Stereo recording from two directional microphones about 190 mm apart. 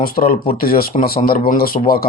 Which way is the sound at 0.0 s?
50° left (ahead or behind).